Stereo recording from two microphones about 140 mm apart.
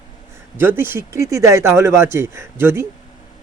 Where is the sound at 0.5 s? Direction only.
15° right (ahead or behind).